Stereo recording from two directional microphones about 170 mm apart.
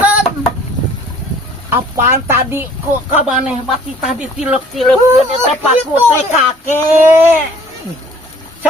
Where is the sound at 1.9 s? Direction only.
15° right (ahead or behind).